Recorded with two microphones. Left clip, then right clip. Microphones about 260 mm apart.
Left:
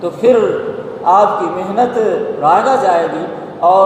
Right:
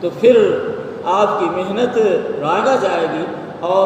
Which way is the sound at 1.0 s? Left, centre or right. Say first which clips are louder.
Left 5 dB; centre.